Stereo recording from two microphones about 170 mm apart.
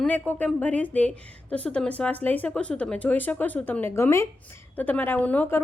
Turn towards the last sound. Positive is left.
turn(degrees=10)  # may be behind; listen again after turning